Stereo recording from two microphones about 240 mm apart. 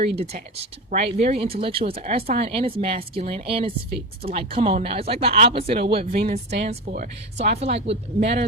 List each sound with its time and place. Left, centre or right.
0.9 s speech: right
7.6 s speech: right